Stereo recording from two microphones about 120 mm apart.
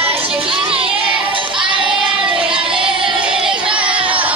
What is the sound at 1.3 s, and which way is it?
Child singing, 45° right (ahead or behind).